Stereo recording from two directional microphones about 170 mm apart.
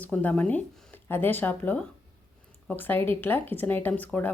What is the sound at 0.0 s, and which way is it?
Speech, 10° left (ahead or behind).